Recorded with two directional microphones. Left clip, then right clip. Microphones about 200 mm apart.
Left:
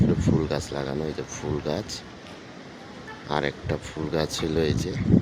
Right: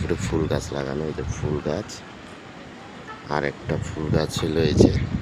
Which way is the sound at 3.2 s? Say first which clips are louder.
Right 1 dB; centre (ahead or behind).